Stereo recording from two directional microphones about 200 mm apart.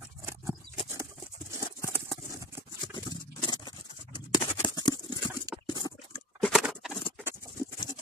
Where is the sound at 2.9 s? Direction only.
20° left (ahead or behind).